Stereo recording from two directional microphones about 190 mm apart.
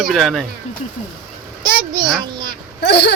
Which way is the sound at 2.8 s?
65° left (ahead or behind).